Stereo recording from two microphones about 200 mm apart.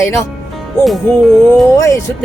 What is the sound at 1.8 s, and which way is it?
Speech, 15° left (ahead or behind).